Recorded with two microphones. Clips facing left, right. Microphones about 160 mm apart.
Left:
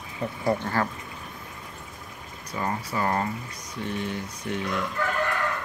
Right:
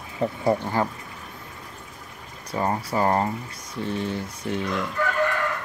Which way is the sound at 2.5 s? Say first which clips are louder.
Right 5 dB; 30° right (ahead or behind).